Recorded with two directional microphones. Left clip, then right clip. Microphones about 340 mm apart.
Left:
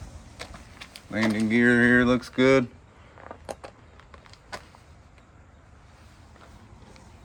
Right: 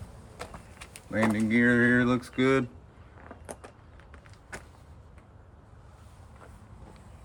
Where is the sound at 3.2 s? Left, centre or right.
Centre.